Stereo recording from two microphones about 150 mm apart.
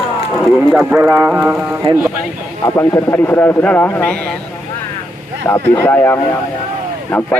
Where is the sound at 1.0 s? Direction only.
20° right (ahead or behind).